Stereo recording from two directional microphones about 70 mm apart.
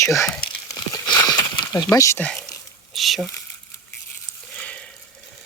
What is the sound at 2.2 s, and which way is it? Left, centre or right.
Speech, left.